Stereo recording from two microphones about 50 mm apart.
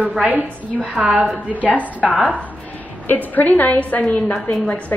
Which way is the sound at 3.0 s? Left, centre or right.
Left.